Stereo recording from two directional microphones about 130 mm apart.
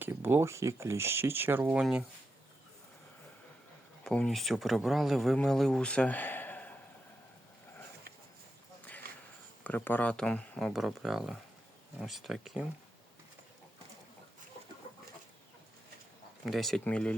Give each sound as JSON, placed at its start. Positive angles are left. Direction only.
{"t": 0.0, "sound": "speech", "side_deg": -15}
{"t": 4.0, "sound": "speech", "side_deg": 5}
{"t": 9.6, "sound": "speech", "side_deg": 15}
{"t": 16.5, "sound": "speech", "side_deg": 0}